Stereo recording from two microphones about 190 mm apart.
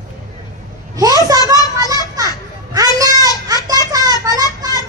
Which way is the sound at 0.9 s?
20° right (ahead or behind).